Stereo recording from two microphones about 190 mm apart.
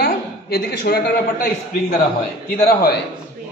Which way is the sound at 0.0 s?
55° left (ahead or behind).